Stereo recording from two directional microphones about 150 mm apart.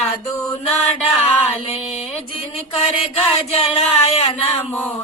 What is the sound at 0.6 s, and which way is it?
Music, 40° left (ahead or behind).